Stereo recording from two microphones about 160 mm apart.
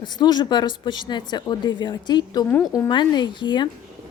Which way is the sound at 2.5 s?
15° left (ahead or behind).